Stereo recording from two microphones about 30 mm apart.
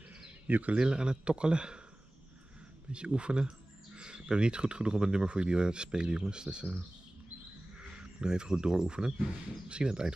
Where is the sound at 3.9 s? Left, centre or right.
Right.